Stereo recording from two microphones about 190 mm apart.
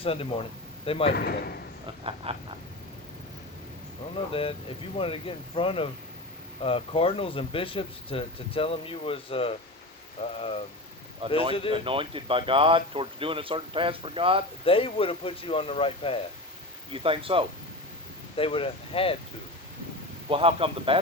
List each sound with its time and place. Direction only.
0.0 s speech: 30° left (ahead or behind)
1.1 s speech: 55° left (ahead or behind)
2.3 s a sound: 30° right (ahead or behind)
4.3 s speech: 30° left (ahead or behind)
11.2 s speech: 30° right (ahead or behind)
14.6 s speech: 30° left (ahead or behind)
16.9 s speech: 30° right (ahead or behind)
18.3 s speech: 30° left (ahead or behind)
20.3 s speech: 30° right (ahead or behind)